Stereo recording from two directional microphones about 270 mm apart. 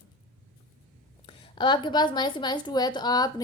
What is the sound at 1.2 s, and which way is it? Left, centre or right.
A woman's voice, centre.